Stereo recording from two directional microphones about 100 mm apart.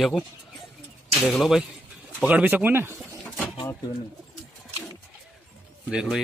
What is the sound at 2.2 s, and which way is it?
Speech, 15° right (ahead or behind).